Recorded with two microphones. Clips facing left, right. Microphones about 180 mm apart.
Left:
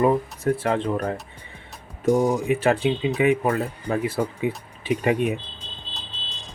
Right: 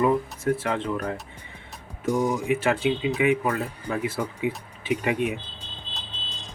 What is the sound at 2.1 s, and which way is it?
Speech, 35° left (ahead or behind).